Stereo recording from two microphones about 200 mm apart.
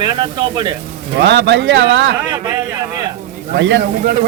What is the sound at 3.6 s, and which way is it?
Speech, 60° right (ahead or behind).